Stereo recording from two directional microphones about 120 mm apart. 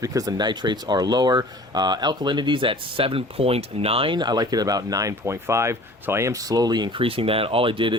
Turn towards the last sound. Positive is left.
turn(degrees=-45)  # may be behind; listen again after turning